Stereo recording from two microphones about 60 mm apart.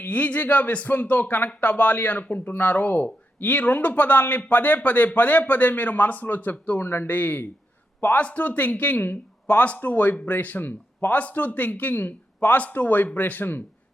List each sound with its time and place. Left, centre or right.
0.0 s speech: left
7.1 s speech: left